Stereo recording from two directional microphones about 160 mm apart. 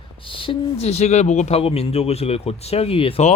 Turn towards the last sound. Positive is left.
turn(degrees=35)  # may be behind; listen again after turning